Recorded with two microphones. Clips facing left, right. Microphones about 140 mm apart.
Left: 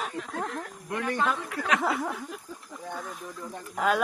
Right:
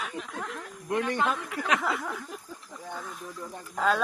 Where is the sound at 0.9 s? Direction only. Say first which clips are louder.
Right 1 dB; 20° right (ahead or behind).